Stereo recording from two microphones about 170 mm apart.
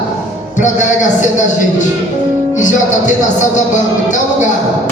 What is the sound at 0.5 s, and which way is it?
Speech, 45° left (ahead or behind).